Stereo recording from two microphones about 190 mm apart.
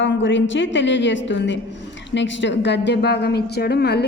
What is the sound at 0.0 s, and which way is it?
A woman's voice, 75° left (ahead or behind).